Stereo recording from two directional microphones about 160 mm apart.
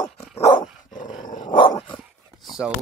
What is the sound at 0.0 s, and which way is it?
Dog, 25° left (ahead or behind).